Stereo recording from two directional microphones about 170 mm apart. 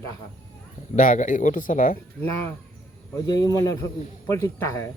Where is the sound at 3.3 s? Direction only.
20° left (ahead or behind).